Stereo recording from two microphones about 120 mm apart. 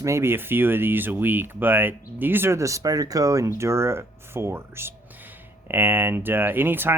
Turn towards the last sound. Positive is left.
turn(degrees=-15)  # may be behind; listen again after turning